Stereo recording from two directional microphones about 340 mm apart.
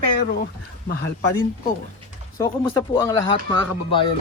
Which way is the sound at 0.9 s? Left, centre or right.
Left.